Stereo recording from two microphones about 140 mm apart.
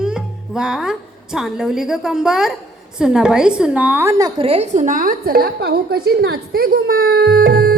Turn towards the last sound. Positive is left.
turn(degrees=-90)